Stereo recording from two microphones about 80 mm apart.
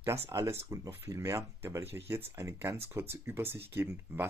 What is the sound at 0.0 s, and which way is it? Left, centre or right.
Speech, right.